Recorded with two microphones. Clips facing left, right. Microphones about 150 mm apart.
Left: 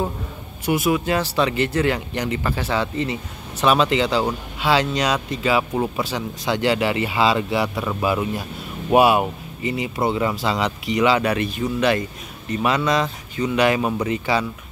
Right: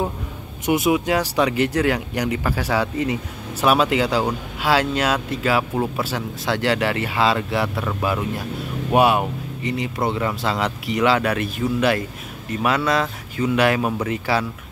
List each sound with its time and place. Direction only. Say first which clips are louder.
0.7 s speech: right 1 dB; 20° right (ahead or behind); by 14.4 s 5° right (ahead or behind)